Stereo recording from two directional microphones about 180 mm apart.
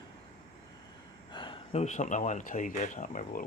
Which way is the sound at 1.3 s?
25° left (ahead or behind).